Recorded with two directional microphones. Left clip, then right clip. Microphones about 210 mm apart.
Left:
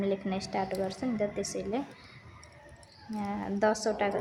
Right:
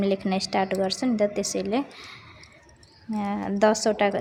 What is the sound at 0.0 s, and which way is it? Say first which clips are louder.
A woman's voice: right 7 dB; 40° right (ahead or behind).